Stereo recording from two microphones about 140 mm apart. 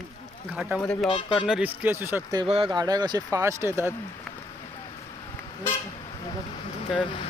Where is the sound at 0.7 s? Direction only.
5° left (ahead or behind).